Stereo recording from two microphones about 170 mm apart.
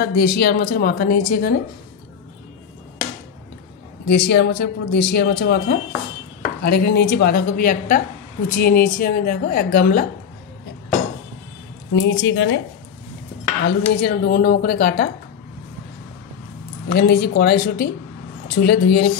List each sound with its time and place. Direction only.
0.0 s a woman's voice: 65° left (ahead or behind)
4.1 s a woman's voice: 85° left; by 10.0 s 60° left (ahead or behind)
11.9 s speech: 90° left
13.7 s a woman's voice: 65° left (ahead or behind)
16.9 s a woman's voice: 65° left (ahead or behind)